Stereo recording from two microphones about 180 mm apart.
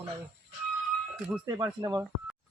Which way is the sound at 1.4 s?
20° right (ahead or behind).